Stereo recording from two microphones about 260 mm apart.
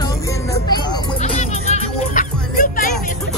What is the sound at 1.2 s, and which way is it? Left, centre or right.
Music, left.